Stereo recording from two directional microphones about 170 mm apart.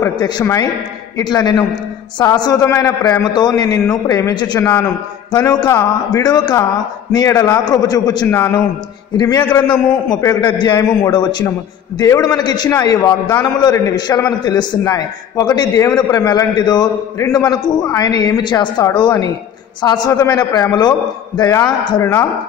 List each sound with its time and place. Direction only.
0.0 s a man's voice: 20° left (ahead or behind)
4.6 s a man's voice: 10° left (ahead or behind)
5.3 s a man's voice: 25° left (ahead or behind)